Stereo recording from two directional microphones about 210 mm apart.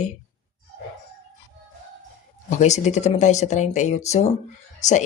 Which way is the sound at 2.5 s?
35° left (ahead or behind).